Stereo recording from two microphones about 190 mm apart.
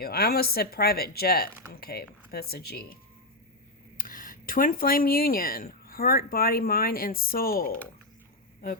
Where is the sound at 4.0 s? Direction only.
45° left (ahead or behind).